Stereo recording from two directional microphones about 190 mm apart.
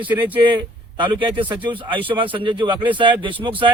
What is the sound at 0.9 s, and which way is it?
Speech, 25° right (ahead or behind).